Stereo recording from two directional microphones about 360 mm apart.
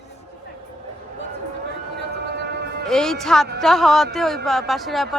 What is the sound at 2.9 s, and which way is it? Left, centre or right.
Speech, centre.